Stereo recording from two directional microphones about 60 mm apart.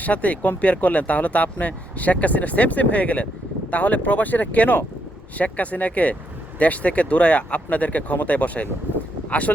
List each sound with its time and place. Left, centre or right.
0.0 s speech: left